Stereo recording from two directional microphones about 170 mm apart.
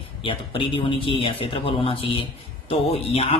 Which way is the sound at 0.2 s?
30° left (ahead or behind).